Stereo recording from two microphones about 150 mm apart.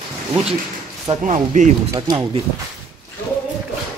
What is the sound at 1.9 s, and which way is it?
Speech, 30° right (ahead or behind).